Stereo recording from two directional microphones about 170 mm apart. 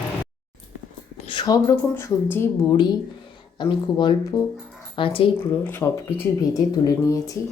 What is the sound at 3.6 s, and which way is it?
Speech, 30° left (ahead or behind).